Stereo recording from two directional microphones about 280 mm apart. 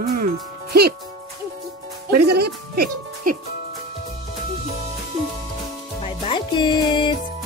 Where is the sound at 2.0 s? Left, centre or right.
Right.